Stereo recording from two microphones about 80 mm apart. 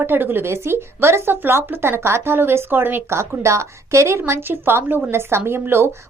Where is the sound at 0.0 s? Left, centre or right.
Right.